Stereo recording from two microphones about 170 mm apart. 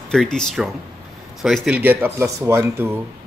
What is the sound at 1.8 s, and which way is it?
Speech, 10° right (ahead or behind).